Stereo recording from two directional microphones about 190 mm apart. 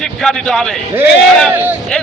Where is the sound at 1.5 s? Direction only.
10° right (ahead or behind).